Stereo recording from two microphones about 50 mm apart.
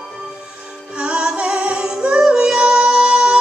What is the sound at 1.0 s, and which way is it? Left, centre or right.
Music, right.